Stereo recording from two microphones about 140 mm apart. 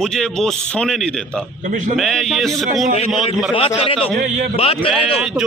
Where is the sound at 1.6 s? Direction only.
60° right (ahead or behind).